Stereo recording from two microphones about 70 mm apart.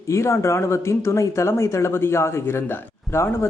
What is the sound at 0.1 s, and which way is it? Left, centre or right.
A man's voice, left.